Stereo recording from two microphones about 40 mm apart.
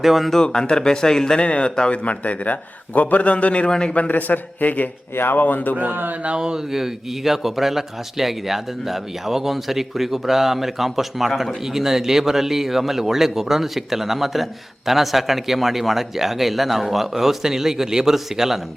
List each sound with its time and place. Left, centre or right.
0.0 s speech: centre
0.4 s speech: centre
1.4 s speech: left
2.0 s a man's voice: left
3.7 s speech: centre
3.9 s a man's voice: left
5.1 s speech: left
5.4 s a man's voice: left
5.7 s speech: right
6.2 s a man's voice: centre